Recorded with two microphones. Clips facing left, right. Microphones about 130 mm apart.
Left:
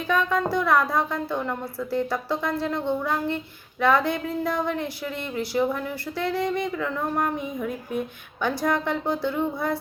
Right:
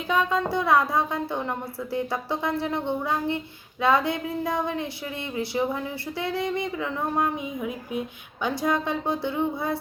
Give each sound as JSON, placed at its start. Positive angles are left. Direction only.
{"t": 0.1, "sound": "a woman's voice", "side_deg": -20}